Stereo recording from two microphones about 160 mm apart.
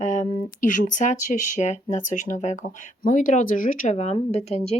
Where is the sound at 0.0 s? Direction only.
50° left (ahead or behind).